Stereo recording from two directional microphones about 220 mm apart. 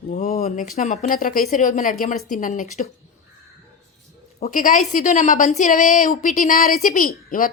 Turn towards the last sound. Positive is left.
turn(degrees=40)  # may be behind; listen again after turning